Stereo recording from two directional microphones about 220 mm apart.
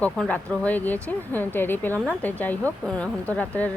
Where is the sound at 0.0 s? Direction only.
5° left (ahead or behind).